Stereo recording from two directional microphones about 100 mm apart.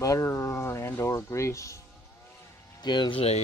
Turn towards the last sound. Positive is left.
turn(degrees=50)  # may be behind; listen again after turning